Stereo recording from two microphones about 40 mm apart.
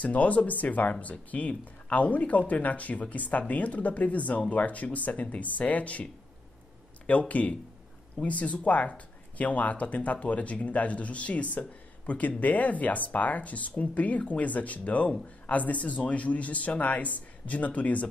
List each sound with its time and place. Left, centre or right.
0.0 s speech: left
7.1 s speech: left